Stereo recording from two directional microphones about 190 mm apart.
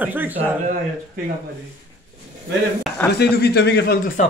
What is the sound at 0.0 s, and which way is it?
Speech, 10° right (ahead or behind).